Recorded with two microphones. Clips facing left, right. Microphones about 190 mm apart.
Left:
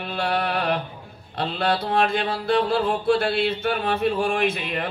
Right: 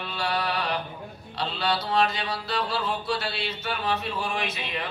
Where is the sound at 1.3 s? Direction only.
55° left (ahead or behind).